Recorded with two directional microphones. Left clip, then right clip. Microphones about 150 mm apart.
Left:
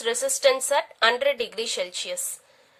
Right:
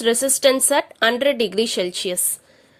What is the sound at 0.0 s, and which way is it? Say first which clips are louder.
A woman's voice: right 5 dB; 35° right (ahead or behind).